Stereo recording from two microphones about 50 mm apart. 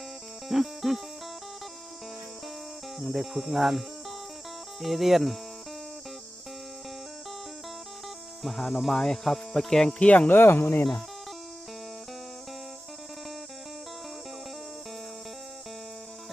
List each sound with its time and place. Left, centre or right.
0.4 s speech: centre
3.0 s speech: centre
8.4 s speech: centre
10.0 s speech: left
10.2 s speech: left